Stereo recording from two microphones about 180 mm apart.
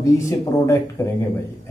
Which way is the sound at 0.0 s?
15° left (ahead or behind).